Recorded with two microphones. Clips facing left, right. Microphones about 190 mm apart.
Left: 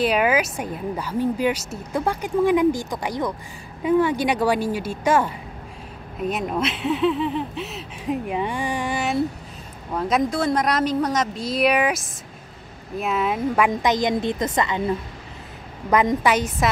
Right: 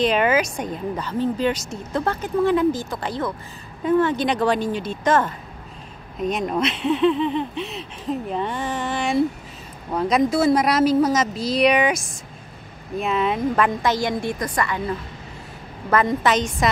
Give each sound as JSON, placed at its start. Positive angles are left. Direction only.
{"t": 0.0, "sound": "a woman's voice", "side_deg": 10}
{"t": 13.7, "sound": "a woman's voice", "side_deg": 15}
{"t": 15.9, "sound": "a woman's voice", "side_deg": 15}